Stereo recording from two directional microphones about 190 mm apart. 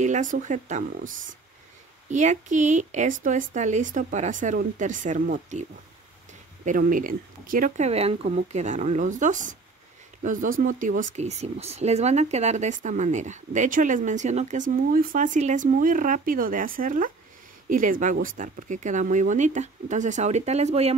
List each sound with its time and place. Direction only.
0.0 s speech: 40° right (ahead or behind)